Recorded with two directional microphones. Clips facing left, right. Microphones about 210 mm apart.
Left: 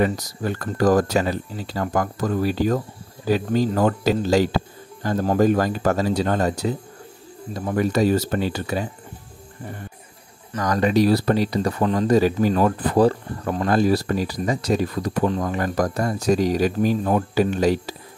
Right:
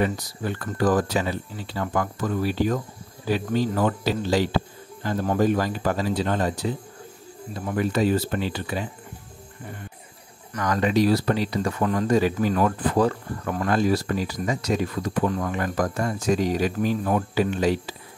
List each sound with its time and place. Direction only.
0.0 s speech: 40° left (ahead or behind)
10.5 s speech: 35° left (ahead or behind)